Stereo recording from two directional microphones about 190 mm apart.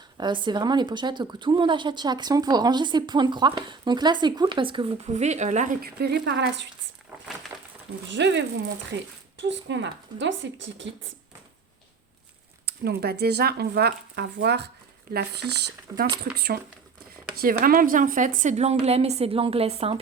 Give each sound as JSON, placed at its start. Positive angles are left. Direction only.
{"t": 0.2, "sound": "speech", "side_deg": -25}
{"t": 7.5, "sound": "a sound", "side_deg": -5}
{"t": 8.1, "sound": "speech", "side_deg": -70}
{"t": 12.6, "sound": "a woman's voice", "side_deg": -60}